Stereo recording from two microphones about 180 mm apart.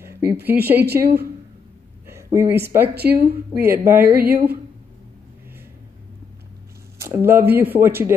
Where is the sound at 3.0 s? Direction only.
60° right (ahead or behind).